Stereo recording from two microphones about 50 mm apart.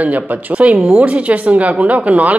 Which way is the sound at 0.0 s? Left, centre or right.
Right.